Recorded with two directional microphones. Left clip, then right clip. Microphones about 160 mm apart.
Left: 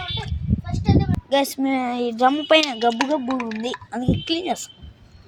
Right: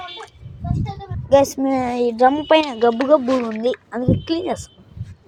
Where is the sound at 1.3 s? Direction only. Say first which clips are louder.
Right 6 dB; 5° left (ahead or behind).